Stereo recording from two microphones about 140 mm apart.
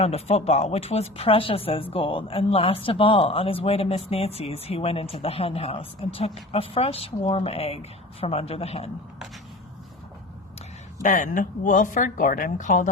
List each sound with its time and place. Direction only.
0.0 s speech: 50° left (ahead or behind)
11.0 s a woman's voice: 70° left (ahead or behind)